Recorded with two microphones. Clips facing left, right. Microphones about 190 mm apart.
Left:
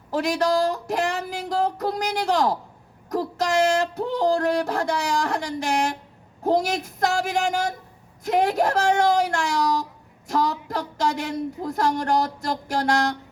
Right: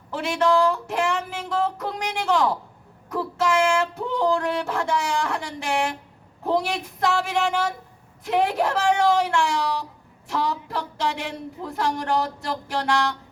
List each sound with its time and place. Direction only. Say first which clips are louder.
0.1 s a woman's voice: even; 40° left (ahead or behind)